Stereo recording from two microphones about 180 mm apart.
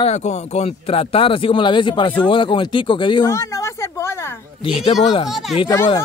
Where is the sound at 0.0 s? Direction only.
40° left (ahead or behind).